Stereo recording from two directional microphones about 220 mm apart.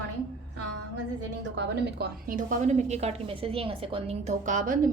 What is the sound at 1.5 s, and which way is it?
A woman's voice, 45° right (ahead or behind).